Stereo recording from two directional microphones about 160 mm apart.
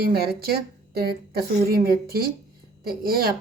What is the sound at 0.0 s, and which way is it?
A woman's voice, 70° right (ahead or behind).